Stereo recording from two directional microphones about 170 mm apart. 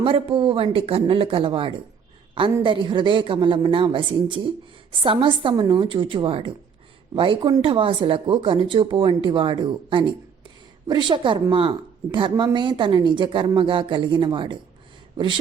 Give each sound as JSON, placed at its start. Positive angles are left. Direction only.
{"t": 0.0, "sound": "speech", "side_deg": -30}